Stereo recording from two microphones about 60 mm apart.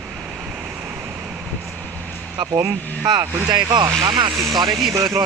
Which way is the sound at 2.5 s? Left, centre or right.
Right.